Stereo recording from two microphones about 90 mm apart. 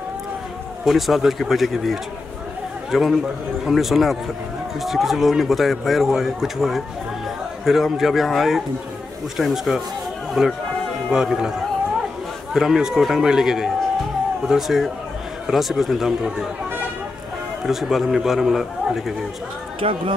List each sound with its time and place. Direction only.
0.8 s a man's voice: centre (ahead or behind)
12.5 s speech: 5° right (ahead or behind)
17.6 s speech: 5° right (ahead or behind)
19.8 s speech: 80° right